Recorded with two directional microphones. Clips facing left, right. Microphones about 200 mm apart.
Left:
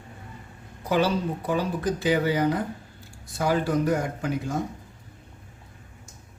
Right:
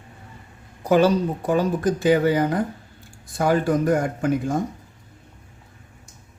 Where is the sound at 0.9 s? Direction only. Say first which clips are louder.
Right 6 dB; 50° right (ahead or behind).